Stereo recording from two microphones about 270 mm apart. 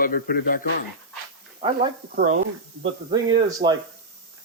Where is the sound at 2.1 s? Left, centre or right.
Right.